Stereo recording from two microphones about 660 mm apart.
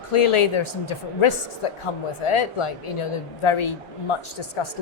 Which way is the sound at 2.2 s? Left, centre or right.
Left.